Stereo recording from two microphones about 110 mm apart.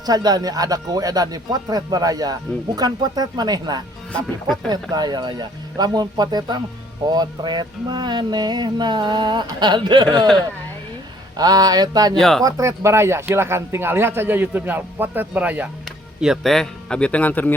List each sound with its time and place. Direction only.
0.0 s speech: 35° right (ahead or behind)
10.2 s a man's voice: 5° left (ahead or behind)
11.3 s speech: 35° right (ahead or behind)
12.1 s speech: 5° left (ahead or behind)
12.4 s speech: 30° right (ahead or behind); by 15.7 s 15° right (ahead or behind)
16.2 s a man's voice: centre (ahead or behind); by 17.5 s 15° left (ahead or behind)